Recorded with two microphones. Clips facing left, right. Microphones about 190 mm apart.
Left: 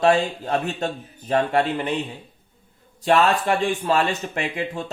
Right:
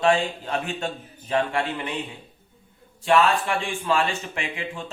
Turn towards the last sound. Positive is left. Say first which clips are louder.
# left 5 dB
turn(degrees=40)  # may be behind; listen again after turning